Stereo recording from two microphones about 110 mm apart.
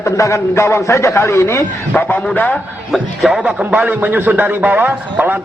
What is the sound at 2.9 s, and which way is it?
A man's voice, 5° right (ahead or behind).